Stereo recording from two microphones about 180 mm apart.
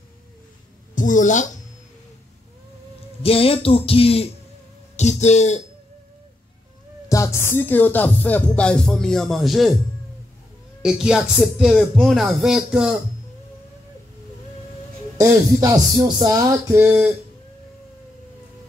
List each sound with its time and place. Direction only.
0.9 s speech: 45° left (ahead or behind)
3.2 s speech: 30° left (ahead or behind)
4.9 s music: 40° left (ahead or behind)
7.1 s music: 15° left (ahead or behind); by 9.8 s centre (ahead or behind)
10.8 s speech: 5° right (ahead or behind)
15.1 s music: 20° right (ahead or behind)
16.7 s speech: 10° right (ahead or behind)